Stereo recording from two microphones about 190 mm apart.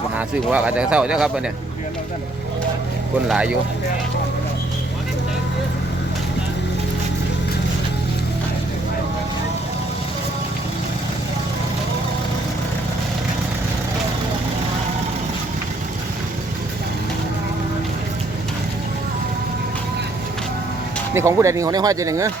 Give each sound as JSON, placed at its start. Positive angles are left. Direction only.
{"t": 0.2, "sound": "speech", "side_deg": -5}
{"t": 3.2, "sound": "speech", "side_deg": -5}
{"t": 21.1, "sound": "speech", "side_deg": -15}